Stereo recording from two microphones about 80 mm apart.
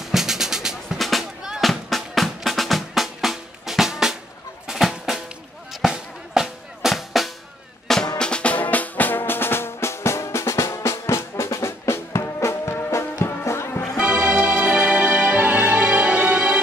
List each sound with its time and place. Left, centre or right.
0.0 s music: centre
4.6 s drum: centre
5.7 s music: centre
8.2 s music: centre; by 13.8 s left
13.9 s music: centre